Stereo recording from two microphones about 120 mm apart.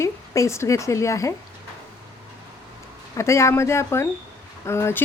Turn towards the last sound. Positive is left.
turn(degrees=20)  # may be behind; listen again after turning